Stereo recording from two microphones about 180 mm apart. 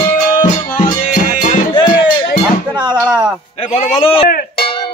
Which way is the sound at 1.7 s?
25° left (ahead or behind).